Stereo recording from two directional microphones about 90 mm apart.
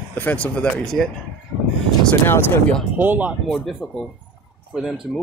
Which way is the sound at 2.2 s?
25° left (ahead or behind).